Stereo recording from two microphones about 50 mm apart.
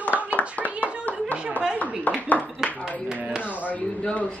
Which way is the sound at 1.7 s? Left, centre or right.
Left.